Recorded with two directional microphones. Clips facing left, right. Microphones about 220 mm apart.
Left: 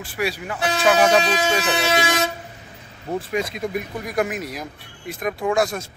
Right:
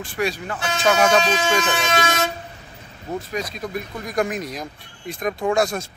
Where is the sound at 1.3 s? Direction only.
35° left (ahead or behind).